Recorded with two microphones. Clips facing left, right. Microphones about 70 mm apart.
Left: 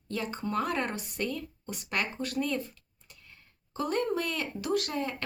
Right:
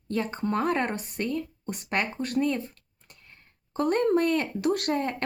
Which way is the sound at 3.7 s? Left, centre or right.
Right.